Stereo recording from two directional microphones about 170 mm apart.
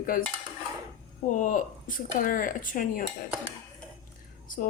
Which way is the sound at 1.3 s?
50° left (ahead or behind).